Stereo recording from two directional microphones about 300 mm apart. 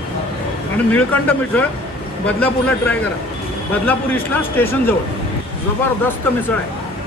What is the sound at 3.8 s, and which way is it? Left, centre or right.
A man's voice, centre.